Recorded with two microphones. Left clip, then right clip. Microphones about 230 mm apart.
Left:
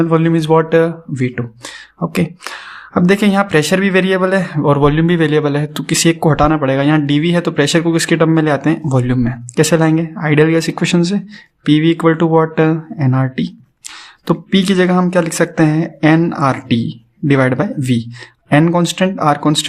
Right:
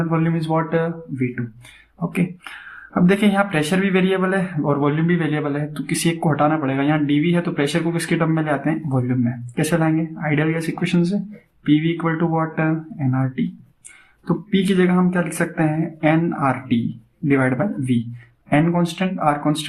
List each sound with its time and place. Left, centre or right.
0.0 s speech: left